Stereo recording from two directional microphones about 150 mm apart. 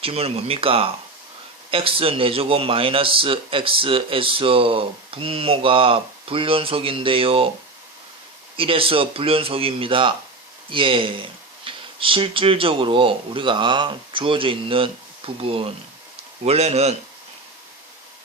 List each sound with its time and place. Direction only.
0.0 s a man's voice: 40° right (ahead or behind)
8.5 s a man's voice: 35° right (ahead or behind)